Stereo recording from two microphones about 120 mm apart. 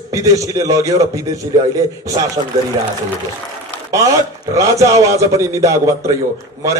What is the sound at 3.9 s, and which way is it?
A man's voice, 30° right (ahead or behind).